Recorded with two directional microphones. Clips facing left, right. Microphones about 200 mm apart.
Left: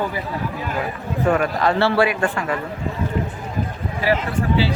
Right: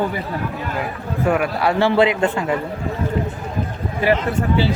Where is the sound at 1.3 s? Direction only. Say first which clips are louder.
Even; 10° right (ahead or behind).